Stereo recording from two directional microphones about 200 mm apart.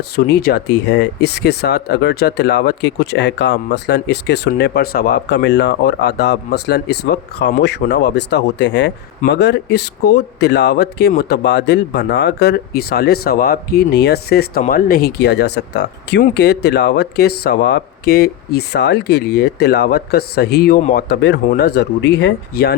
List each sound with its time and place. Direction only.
0.3 s speech: 50° left (ahead or behind)